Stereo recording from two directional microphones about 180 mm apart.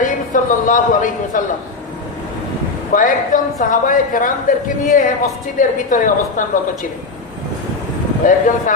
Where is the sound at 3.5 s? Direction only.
50° left (ahead or behind).